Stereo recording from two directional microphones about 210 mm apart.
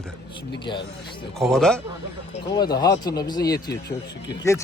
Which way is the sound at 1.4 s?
Centre (ahead or behind).